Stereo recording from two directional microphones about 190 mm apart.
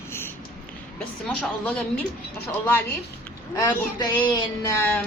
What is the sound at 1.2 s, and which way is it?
Speech, 5° left (ahead or behind).